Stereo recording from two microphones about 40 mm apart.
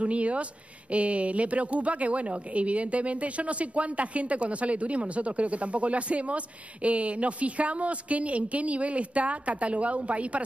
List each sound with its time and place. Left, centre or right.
0.0 s speech: right